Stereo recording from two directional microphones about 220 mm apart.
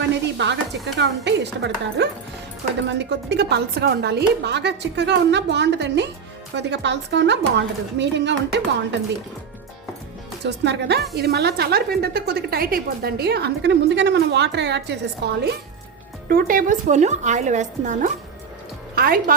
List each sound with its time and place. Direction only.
0.1 s sizzle: 50° right (ahead or behind)
0.9 s a woman's voice: 50° right (ahead or behind)
10.4 s a woman's voice: 50° right (ahead or behind)